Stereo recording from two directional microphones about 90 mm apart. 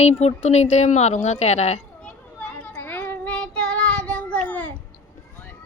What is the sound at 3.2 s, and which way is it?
Child singing, 10° left (ahead or behind).